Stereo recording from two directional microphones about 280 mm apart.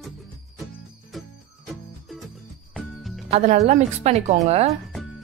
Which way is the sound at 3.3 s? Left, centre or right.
Right.